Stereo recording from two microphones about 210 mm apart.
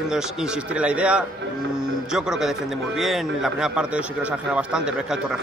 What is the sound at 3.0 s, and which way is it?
A man's voice, centre (ahead or behind).